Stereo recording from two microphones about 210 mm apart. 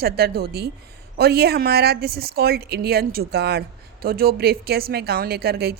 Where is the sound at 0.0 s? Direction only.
50° right (ahead or behind).